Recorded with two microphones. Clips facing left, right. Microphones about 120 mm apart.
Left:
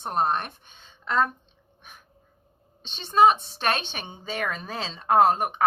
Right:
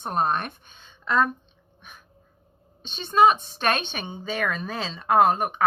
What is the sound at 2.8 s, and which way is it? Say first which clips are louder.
A woman's voice: even; 30° left (ahead or behind).